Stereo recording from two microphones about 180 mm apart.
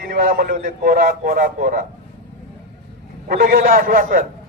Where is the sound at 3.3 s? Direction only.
50° right (ahead or behind).